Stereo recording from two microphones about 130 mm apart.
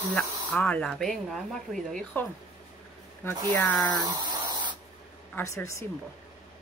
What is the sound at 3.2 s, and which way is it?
Speech, 20° left (ahead or behind).